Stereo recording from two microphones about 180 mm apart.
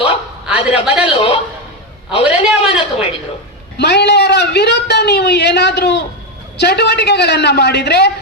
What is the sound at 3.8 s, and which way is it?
A woman's voice, 70° left (ahead or behind).